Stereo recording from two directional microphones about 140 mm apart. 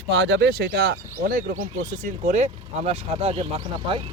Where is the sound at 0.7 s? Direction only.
90° right.